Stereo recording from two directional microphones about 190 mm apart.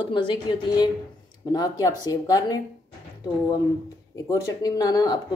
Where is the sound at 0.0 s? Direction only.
25° left (ahead or behind).